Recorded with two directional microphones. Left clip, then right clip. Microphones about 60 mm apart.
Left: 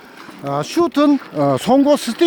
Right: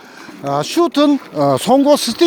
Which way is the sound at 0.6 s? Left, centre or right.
Left.